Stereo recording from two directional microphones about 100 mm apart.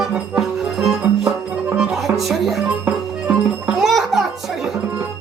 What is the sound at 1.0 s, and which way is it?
Music, 15° right (ahead or behind).